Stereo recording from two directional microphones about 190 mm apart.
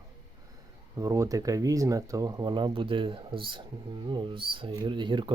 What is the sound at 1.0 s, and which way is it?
Speech, 15° right (ahead or behind).